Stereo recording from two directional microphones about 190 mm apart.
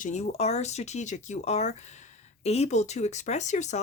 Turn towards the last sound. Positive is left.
turn(degrees=40)  # may be behind; listen again after turning